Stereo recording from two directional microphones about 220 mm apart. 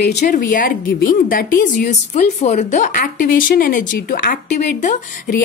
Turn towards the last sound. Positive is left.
turn(degrees=35)  # may be behind; listen again after turning